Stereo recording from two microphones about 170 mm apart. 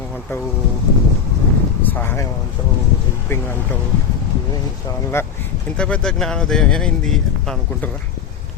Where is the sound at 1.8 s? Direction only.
10° left (ahead or behind).